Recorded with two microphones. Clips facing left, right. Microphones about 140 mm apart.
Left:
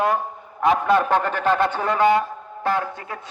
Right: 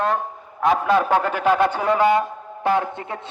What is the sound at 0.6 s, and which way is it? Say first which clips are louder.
A man's voice: even; centre (ahead or behind).